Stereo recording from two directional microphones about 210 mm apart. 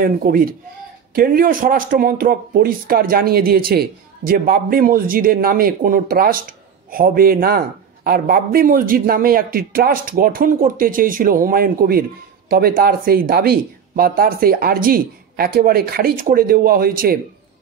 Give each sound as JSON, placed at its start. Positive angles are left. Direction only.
{"t": 0.0, "sound": "speech", "side_deg": -45}